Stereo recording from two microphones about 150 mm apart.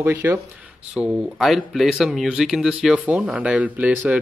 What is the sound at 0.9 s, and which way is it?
Speech, 5° right (ahead or behind).